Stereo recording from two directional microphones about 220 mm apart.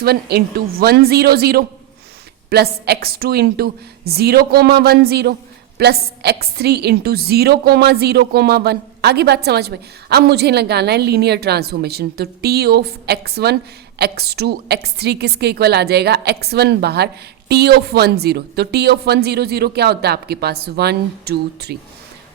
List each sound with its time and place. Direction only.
0.0 s a woman's voice: 45° right (ahead or behind)